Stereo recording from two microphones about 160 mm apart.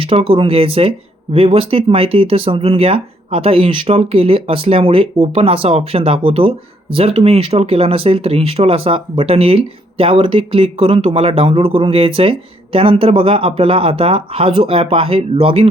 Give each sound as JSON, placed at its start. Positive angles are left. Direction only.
{"t": 0.0, "sound": "speech", "side_deg": -35}